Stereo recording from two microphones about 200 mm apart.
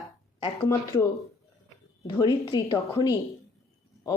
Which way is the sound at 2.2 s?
25° left (ahead or behind).